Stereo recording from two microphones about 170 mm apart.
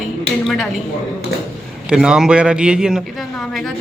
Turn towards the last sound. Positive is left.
turn(degrees=-5)  # may be behind; listen again after turning